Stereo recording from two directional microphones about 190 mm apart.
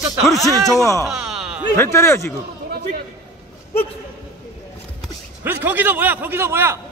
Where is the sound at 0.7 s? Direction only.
15° left (ahead or behind).